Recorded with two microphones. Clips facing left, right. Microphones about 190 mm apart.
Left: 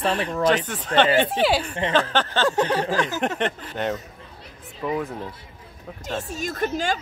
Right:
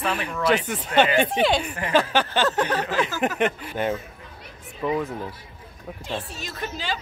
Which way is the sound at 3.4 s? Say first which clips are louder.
Right 2 dB; 10° right (ahead or behind).